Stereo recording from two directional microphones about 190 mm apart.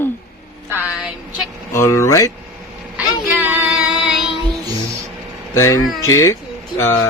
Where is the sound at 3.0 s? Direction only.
10° right (ahead or behind).